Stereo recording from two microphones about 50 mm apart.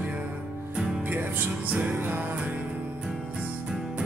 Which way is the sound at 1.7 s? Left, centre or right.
Right.